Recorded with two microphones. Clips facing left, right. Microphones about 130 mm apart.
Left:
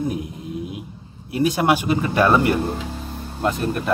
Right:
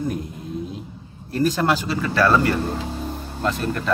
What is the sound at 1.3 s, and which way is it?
Speech, 10° left (ahead or behind).